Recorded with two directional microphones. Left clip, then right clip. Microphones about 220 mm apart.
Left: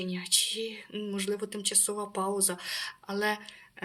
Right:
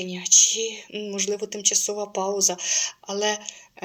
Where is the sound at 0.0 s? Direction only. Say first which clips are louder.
Right 10 dB; 15° left (ahead or behind).